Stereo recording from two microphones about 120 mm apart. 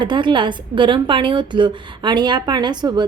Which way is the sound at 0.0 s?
40° right (ahead or behind).